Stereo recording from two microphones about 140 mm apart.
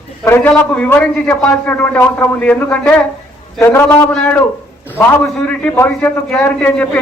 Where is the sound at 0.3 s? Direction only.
15° left (ahead or behind).